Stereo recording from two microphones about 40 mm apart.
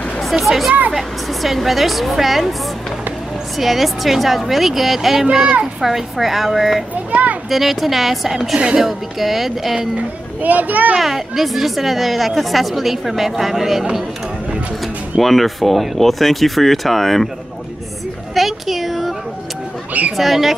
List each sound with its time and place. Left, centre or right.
0.2 s speech: centre
3.5 s speech: centre
7.1 s a child's voice: right
7.4 s speech: centre
10.4 s a child's voice: right
11.0 s speech: centre
15.1 s speech: centre
18.3 s a sound: centre
20.2 s speech: centre